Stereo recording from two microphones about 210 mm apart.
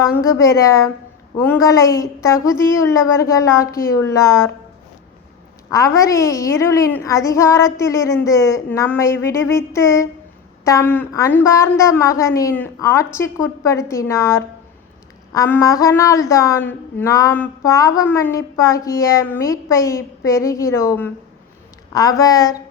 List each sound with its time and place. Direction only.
0.2 s a woman's voice: 15° left (ahead or behind)
5.7 s a woman's voice: 15° left (ahead or behind)